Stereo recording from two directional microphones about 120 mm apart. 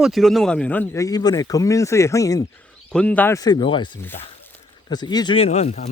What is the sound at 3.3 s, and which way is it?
Speech, 35° left (ahead or behind).